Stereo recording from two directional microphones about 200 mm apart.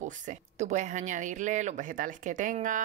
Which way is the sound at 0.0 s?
40° right (ahead or behind).